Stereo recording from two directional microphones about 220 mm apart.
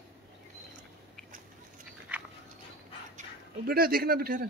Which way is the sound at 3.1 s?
45° right (ahead or behind).